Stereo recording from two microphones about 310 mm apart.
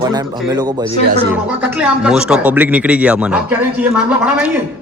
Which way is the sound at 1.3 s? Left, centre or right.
Centre.